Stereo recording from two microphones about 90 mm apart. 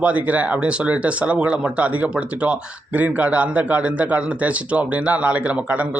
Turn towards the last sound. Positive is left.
turn(degrees=-15)  # may be behind; listen again after turning